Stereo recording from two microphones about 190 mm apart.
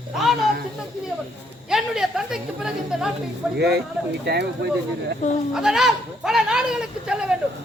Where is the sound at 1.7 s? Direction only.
Centre (ahead or behind).